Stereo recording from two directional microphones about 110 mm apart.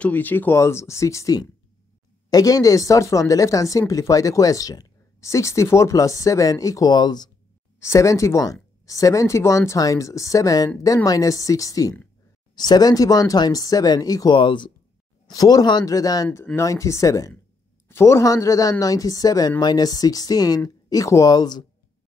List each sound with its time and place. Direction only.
0.0 s a woman's voice: 15° left (ahead or behind); by 7.2 s 40° left (ahead or behind)
7.8 s a woman's voice: 25° left (ahead or behind); by 14.7 s 45° left (ahead or behind)
15.2 s a woman's voice: 35° left (ahead or behind)